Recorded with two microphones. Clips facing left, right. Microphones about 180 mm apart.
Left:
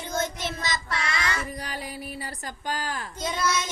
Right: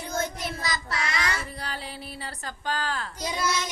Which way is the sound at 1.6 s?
15° left (ahead or behind).